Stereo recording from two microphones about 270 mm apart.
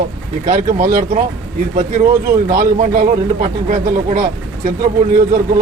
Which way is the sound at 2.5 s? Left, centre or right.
Right.